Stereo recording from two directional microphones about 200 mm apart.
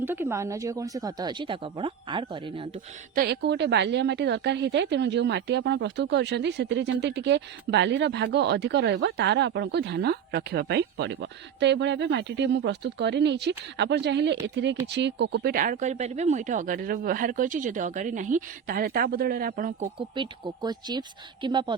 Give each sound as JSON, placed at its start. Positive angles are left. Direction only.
{"t": 0.0, "sound": "speech", "side_deg": -10}
{"t": 3.2, "sound": "a woman's voice", "side_deg": -55}
{"t": 20.0, "sound": "speech", "side_deg": -25}